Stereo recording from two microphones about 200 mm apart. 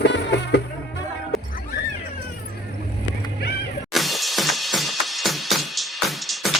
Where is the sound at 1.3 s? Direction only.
Centre (ahead or behind).